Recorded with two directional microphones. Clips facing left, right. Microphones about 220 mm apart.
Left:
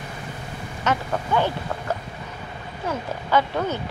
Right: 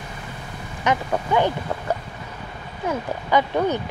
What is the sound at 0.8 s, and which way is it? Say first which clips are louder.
Speech: right 2 dB; 15° right (ahead or behind).